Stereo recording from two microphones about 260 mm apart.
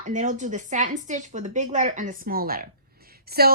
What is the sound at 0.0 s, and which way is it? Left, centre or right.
Speech, right.